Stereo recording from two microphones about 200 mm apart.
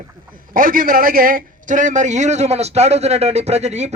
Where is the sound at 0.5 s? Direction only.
45° right (ahead or behind).